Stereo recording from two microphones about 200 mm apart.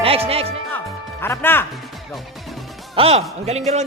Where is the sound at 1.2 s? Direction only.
10° left (ahead or behind).